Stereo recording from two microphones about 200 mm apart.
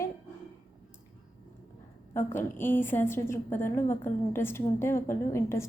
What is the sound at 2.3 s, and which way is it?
A woman's voice, 10° left (ahead or behind).